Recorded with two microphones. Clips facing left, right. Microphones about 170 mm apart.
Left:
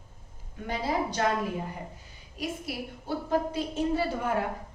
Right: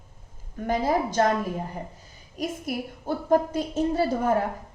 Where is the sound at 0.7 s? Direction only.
45° right (ahead or behind).